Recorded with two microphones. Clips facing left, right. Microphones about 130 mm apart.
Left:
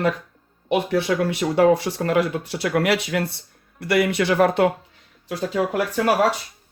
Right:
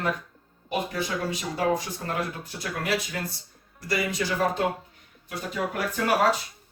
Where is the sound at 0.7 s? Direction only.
70° left (ahead or behind).